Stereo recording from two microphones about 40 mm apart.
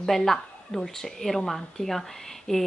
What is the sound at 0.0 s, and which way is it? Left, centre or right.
A woman's voice, centre.